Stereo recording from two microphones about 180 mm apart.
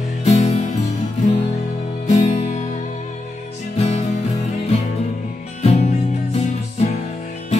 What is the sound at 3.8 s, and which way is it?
Music, 35° left (ahead or behind).